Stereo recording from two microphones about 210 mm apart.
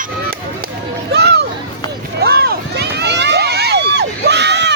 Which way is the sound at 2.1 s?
50° right (ahead or behind).